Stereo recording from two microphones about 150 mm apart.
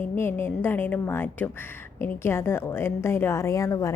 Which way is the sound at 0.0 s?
15° left (ahead or behind).